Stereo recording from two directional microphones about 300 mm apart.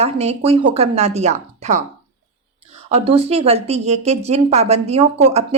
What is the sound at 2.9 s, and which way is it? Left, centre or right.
Speech, centre.